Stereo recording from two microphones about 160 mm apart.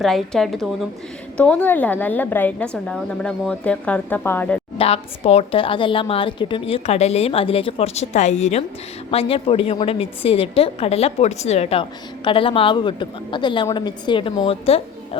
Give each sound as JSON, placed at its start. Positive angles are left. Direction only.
{"t": 0.0, "sound": "a woman's voice", "side_deg": 0}
{"t": 4.8, "sound": "a woman's voice", "side_deg": 40}
{"t": 9.0, "sound": "a woman's voice", "side_deg": 35}